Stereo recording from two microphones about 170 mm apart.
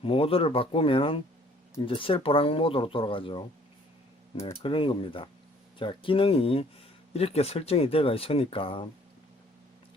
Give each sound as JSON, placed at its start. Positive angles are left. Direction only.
{"t": 0.0, "sound": "speech", "side_deg": 35}
{"t": 4.6, "sound": "speech", "side_deg": 30}